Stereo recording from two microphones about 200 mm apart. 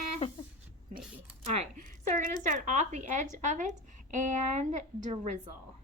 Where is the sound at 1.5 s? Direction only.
35° right (ahead or behind).